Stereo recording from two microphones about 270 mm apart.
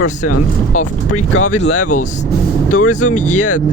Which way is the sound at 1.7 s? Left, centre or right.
Left.